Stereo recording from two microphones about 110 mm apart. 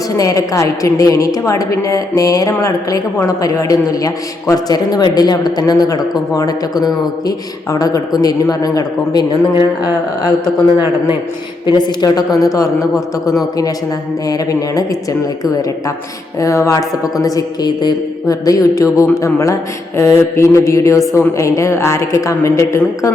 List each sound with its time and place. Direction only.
0.2 s a woman's voice: 30° left (ahead or behind)
11.6 s a woman's voice: 40° left (ahead or behind)
16.4 s a woman's voice: 30° left (ahead or behind)